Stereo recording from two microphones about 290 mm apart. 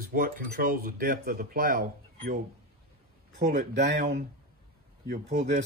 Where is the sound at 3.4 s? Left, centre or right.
Right.